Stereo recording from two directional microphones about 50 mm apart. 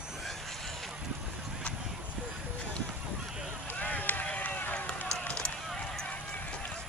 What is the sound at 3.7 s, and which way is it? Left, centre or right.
Run, left.